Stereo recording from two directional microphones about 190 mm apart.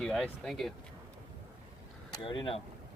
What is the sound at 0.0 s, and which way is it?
Speech, centre (ahead or behind).